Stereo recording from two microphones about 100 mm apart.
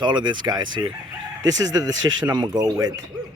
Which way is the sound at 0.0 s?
50° right (ahead or behind).